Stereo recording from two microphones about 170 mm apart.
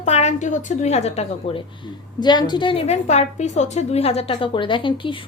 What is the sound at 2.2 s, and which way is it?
A woman's voice, 25° left (ahead or behind).